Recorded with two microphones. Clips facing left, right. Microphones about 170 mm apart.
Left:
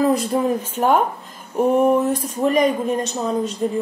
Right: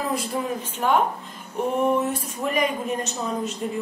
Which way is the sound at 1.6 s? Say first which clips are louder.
Left 8 dB; 45° left (ahead or behind).